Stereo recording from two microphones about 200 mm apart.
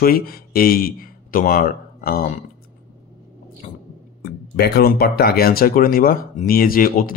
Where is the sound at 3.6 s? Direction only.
35° left (ahead or behind).